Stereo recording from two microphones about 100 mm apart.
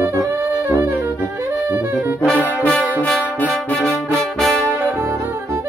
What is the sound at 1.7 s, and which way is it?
Saxophone, 20° right (ahead or behind).